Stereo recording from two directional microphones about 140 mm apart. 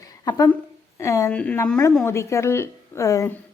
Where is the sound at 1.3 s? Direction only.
10° left (ahead or behind).